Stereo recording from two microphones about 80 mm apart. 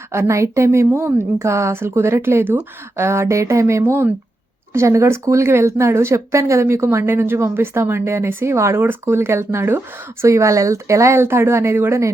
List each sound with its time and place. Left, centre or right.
0.1 s speech: right